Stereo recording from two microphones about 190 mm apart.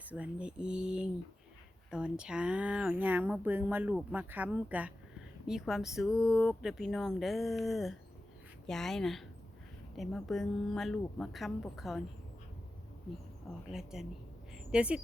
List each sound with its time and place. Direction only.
0.1 s speech: 5° right (ahead or behind)
13.7 s speech: centre (ahead or behind)